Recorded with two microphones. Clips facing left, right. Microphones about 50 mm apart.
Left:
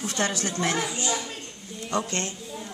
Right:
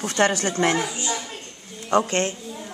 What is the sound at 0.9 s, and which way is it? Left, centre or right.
Speech, centre.